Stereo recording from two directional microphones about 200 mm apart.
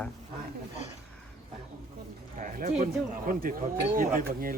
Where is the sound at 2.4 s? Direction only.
40° right (ahead or behind).